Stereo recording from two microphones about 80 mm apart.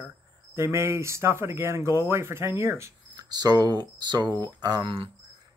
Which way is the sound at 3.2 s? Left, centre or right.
Right.